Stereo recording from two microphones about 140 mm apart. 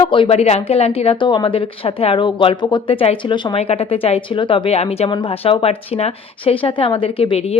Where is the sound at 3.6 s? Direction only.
45° left (ahead or behind).